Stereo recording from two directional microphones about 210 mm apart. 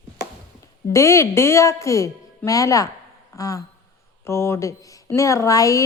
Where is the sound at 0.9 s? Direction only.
15° left (ahead or behind).